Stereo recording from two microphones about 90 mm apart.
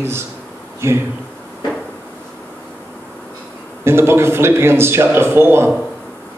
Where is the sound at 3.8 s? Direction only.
30° right (ahead or behind).